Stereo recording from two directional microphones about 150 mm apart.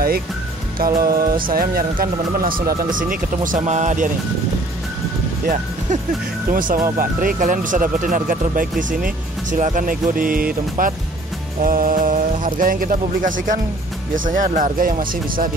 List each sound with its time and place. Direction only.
0.7 s speech: 75° right (ahead or behind); by 4.1 s 55° right (ahead or behind)
6.5 s speech: 65° right (ahead or behind)
11.6 s music: 70° right (ahead or behind)
12.5 s speech: 65° right (ahead or behind)